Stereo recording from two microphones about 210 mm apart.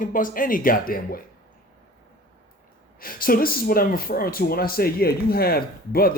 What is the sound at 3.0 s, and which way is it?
Speech, 45° left (ahead or behind).